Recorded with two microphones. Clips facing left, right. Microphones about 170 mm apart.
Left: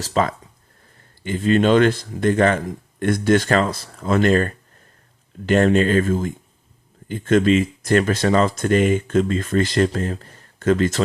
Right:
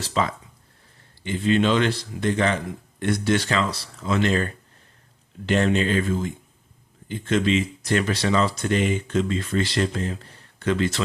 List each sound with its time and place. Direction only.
0.0 s speech: 45° left (ahead or behind)